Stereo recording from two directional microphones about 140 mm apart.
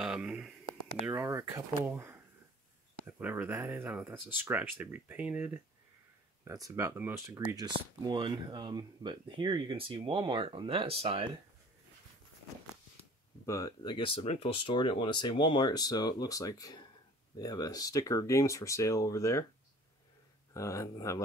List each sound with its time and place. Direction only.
0.0 s speech: 5° right (ahead or behind)
1.1 s speech: 25° right (ahead or behind)
6.4 s speech: 25° right (ahead or behind)
7.5 s speech: 30° right (ahead or behind)
13.5 s speech: 25° left (ahead or behind)
20.5 s speech: 20° left (ahead or behind)